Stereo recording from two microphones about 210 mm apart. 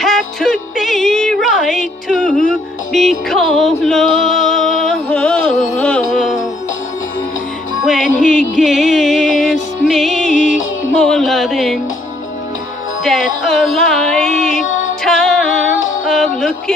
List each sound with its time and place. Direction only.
0.0 s music: centre (ahead or behind)
7.8 s music: centre (ahead or behind)
10.3 s music: 40° left (ahead or behind)
11.0 s music: 5° left (ahead or behind)
13.0 s music: centre (ahead or behind)
16.1 s a sound: centre (ahead or behind)